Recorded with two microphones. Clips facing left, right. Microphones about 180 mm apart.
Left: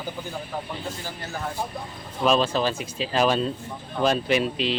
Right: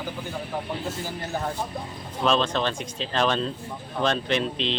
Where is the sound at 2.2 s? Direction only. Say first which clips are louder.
Left 2 dB; 5° left (ahead or behind).